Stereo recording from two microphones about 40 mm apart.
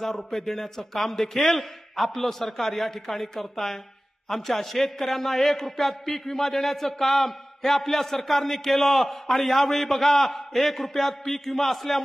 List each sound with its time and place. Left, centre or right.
0.0 s a man's voice: centre